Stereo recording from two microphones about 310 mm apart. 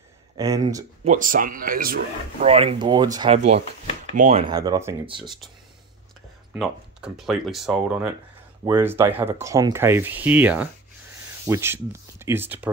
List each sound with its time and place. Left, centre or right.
0.4 s speech: centre
1.0 s speech: right
6.5 s speech: centre